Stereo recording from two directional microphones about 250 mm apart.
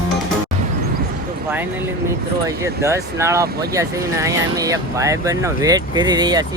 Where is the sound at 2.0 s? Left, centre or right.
Centre.